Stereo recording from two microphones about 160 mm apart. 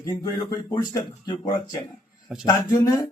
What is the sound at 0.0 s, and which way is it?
Speech, 25° left (ahead or behind).